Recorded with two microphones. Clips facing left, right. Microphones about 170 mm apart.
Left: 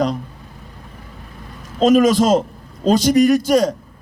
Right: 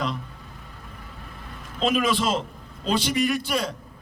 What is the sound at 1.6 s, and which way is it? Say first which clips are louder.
A man's voice: left 11 dB; 40° left (ahead or behind).